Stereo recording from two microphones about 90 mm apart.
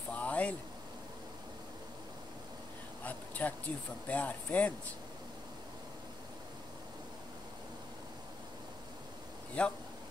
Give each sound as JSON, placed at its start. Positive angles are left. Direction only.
{"t": 0.1, "sound": "vehicle", "side_deg": 15}
{"t": 3.0, "sound": "a sound", "side_deg": 20}
{"t": 4.1, "sound": "speech", "side_deg": 15}
{"t": 9.6, "sound": "speech", "side_deg": 15}